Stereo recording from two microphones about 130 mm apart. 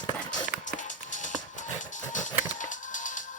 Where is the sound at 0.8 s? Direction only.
75° left (ahead or behind).